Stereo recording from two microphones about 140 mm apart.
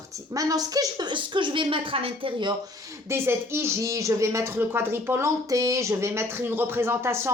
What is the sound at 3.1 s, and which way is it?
Speech, 20° right (ahead or behind).